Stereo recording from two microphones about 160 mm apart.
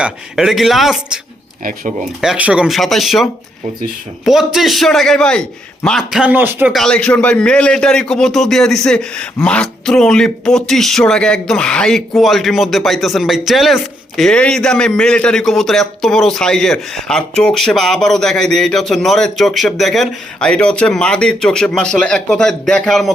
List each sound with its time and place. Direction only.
0.0 s a man's voice: centre (ahead or behind)
1.6 s speech: 60° right (ahead or behind)
2.2 s a man's voice: 5° right (ahead or behind)
4.3 s a man's voice: centre (ahead or behind)
6.7 s a man's voice: 5° left (ahead or behind)